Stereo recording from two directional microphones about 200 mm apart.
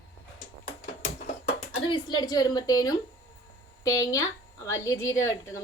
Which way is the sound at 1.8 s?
25° left (ahead or behind).